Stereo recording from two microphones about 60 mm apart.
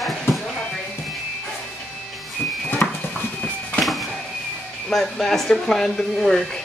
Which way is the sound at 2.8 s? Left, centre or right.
Left.